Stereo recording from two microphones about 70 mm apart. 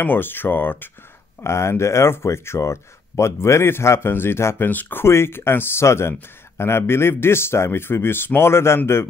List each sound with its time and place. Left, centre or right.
0.0 s speech: left
1.4 s speech: left
4.6 s speech: left
5.0 s speech: left